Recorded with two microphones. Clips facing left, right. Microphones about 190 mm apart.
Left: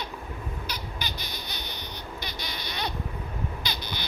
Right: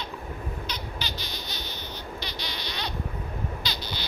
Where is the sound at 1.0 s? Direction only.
55° left (ahead or behind).